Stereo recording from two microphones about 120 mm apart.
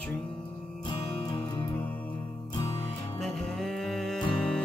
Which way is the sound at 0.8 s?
40° left (ahead or behind).